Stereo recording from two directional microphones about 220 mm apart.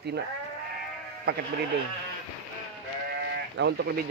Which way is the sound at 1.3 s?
45° right (ahead or behind).